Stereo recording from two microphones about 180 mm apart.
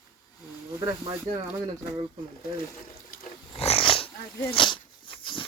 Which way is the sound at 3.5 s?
30° left (ahead or behind).